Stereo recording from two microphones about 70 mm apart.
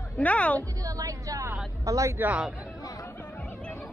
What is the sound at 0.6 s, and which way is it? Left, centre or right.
Speech, right.